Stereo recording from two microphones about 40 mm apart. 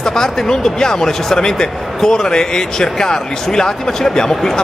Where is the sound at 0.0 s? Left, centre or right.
Centre.